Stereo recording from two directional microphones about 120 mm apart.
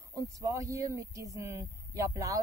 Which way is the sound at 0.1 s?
30° right (ahead or behind).